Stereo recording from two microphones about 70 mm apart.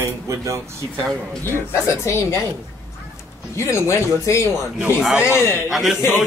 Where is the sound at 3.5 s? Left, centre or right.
Left.